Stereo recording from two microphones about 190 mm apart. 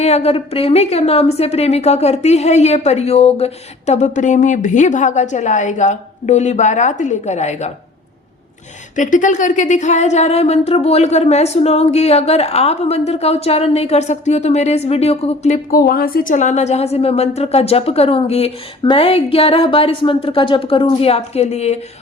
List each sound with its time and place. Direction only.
0.0 s a woman's voice: 35° left (ahead or behind)
9.0 s a woman's voice: 40° left (ahead or behind)